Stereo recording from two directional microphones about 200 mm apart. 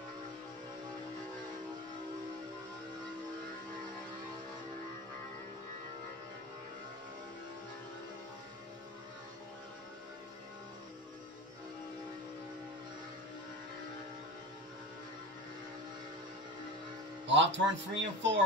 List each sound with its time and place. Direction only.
17.3 s speech: 65° right (ahead or behind)